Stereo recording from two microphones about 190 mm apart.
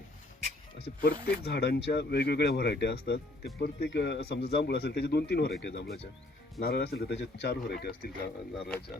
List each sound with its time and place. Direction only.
1.0 s speech: 60° left (ahead or behind)